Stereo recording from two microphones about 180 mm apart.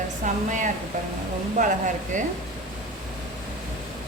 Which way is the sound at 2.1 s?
45° right (ahead or behind).